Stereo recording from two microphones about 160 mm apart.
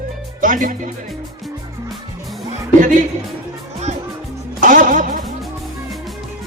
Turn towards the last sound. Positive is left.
turn(degrees=-55)  # may be behind; listen again after turning